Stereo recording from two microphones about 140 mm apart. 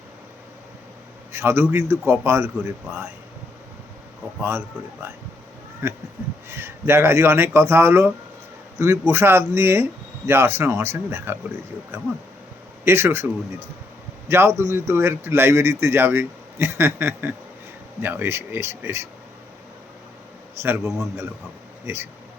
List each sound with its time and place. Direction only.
1.3 s speech: 15° right (ahead or behind)
4.4 s speech: 15° right (ahead or behind)
5.8 s speech: 15° right (ahead or behind)
12.8 s speech: 15° right (ahead or behind)
20.6 s speech: 20° right (ahead or behind)